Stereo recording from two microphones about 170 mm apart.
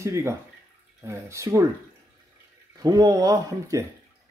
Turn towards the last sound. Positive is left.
turn(degrees=-20)  # may be behind; listen again after turning